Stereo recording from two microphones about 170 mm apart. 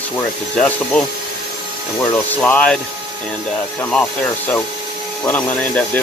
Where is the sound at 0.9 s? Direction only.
10° left (ahead or behind).